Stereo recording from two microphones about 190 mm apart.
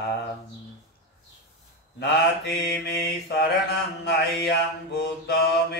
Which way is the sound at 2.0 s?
60° left (ahead or behind).